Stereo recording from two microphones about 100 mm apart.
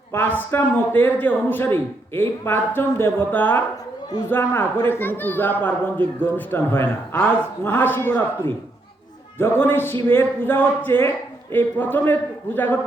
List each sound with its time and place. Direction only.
0.1 s a man's voice: 20° left (ahead or behind)